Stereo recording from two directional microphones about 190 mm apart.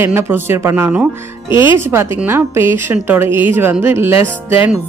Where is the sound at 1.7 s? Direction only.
15° right (ahead or behind).